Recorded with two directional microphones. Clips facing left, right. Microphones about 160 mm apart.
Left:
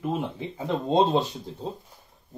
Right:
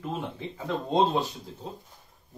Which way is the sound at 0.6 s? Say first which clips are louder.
Left 3 dB; 25° left (ahead or behind).